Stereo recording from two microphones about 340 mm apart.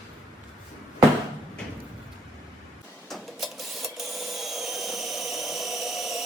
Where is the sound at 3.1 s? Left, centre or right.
Centre.